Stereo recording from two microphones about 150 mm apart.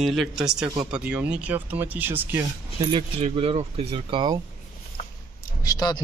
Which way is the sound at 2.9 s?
40° right (ahead or behind).